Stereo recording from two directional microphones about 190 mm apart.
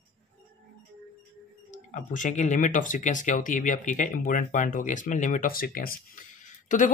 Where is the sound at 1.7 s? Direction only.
40° left (ahead or behind).